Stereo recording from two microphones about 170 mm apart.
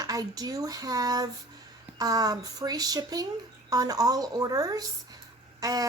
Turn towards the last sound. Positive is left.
turn(degrees=-20)  # may be behind; listen again after turning